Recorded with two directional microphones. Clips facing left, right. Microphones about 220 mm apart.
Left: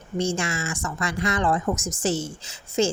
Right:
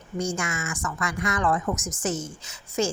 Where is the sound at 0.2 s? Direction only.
25° left (ahead or behind).